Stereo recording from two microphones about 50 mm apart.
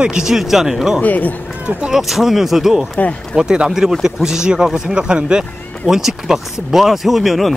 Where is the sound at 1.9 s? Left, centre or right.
Centre.